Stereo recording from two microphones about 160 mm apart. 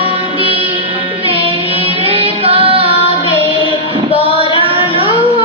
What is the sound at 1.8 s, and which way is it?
Music, 35° right (ahead or behind).